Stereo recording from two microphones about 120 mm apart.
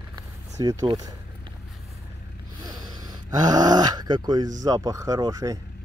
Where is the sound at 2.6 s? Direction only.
30° right (ahead or behind).